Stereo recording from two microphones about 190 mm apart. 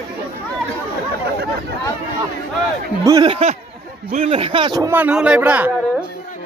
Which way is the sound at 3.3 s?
30° right (ahead or behind).